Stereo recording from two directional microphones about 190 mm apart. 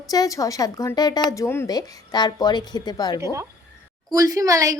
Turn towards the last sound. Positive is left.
turn(degrees=-15)  # may be behind; listen again after turning